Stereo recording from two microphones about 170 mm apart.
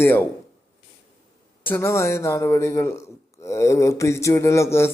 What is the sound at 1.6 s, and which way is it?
A man's voice, 15° left (ahead or behind).